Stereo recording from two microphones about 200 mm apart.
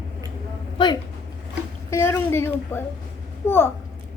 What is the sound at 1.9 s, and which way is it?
A woman's voice, 15° left (ahead or behind).